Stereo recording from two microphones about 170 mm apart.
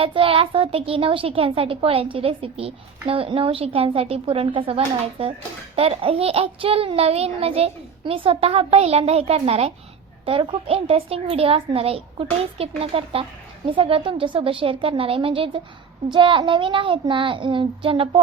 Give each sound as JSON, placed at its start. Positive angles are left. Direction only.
{"t": 0.0, "sound": "a child's voice", "side_deg": -30}